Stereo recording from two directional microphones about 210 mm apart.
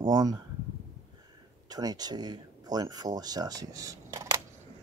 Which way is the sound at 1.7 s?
20° right (ahead or behind).